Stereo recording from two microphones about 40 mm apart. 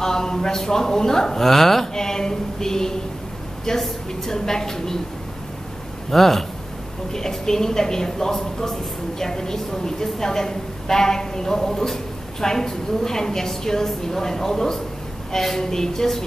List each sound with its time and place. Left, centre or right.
0.0 s a man's voice: centre
6.0 s a woman's voice: centre